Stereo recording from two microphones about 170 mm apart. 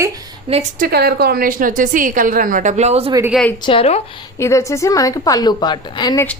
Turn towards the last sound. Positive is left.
turn(degrees=25)  # may be behind; listen again after turning